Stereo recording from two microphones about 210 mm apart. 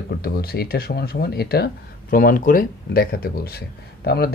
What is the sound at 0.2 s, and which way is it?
Speech, 45° left (ahead or behind).